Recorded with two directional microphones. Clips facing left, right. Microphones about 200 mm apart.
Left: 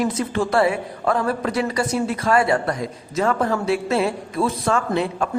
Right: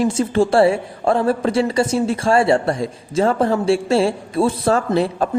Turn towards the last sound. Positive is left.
turn(degrees=-35)  # may be behind; listen again after turning